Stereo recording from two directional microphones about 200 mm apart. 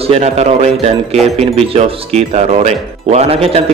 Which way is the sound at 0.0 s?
30° right (ahead or behind).